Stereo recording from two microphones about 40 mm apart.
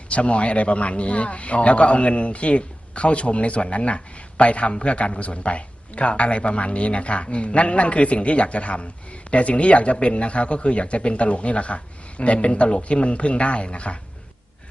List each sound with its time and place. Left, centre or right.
0.1 s a man's voice: left